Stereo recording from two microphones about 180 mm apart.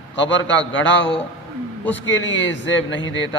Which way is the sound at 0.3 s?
90° left.